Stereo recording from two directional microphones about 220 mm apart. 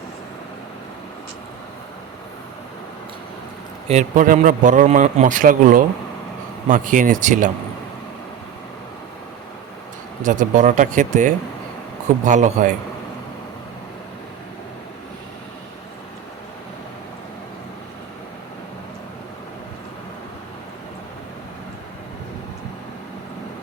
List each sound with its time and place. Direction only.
3.8 s a man's voice: 35° right (ahead or behind)
10.2 s a man's voice: 35° right (ahead or behind)